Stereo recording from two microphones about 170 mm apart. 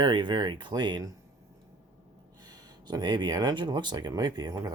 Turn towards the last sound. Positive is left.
turn(degrees=-25)  # may be behind; listen again after turning